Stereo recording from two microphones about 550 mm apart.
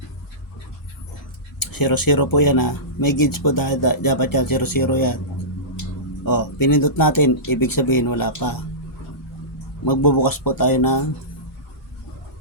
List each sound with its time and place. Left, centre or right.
1.5 s speech: left
6.2 s speech: left
9.8 s speech: left